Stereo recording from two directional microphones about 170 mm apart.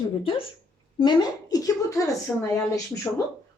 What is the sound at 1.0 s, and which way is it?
Speech, 25° left (ahead or behind).